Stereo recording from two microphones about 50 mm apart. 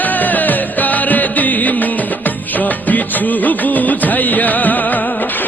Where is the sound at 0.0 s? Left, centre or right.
Left.